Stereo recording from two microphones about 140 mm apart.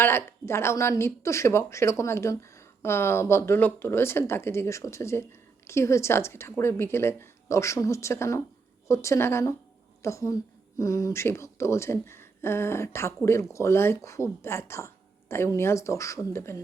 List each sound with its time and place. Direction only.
0.0 s speech: 15° left (ahead or behind)